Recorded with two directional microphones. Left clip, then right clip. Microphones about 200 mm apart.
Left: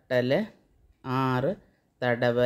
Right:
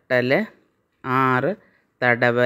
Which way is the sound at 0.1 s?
25° right (ahead or behind).